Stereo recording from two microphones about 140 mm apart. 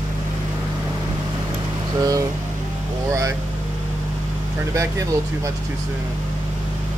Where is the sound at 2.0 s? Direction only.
25° right (ahead or behind).